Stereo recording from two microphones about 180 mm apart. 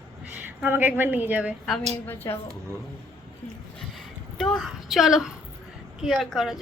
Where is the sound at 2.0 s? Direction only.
10° left (ahead or behind).